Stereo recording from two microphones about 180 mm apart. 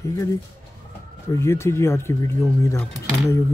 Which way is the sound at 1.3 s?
15° left (ahead or behind).